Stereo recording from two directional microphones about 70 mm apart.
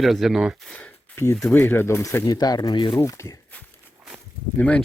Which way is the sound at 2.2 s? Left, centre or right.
Left.